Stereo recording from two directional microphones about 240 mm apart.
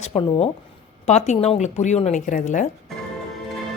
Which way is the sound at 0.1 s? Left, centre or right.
Centre.